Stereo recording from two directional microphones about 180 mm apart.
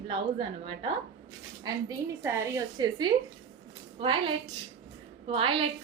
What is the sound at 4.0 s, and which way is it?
A woman's voice, 30° right (ahead or behind).